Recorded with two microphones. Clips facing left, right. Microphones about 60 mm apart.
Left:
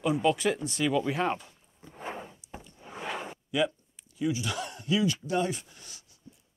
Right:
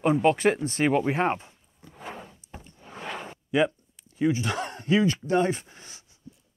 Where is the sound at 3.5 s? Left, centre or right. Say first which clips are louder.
Right 5 dB; right.